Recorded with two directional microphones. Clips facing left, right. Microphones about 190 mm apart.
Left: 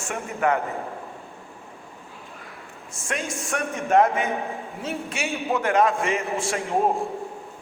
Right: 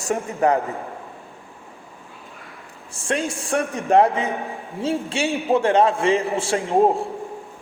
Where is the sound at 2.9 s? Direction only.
30° right (ahead or behind).